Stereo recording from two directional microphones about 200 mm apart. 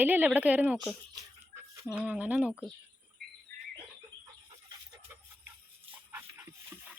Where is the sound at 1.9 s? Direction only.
5° right (ahead or behind).